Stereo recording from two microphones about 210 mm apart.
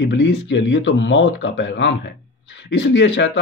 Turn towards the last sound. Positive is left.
turn(degrees=60)  # may be behind; listen again after turning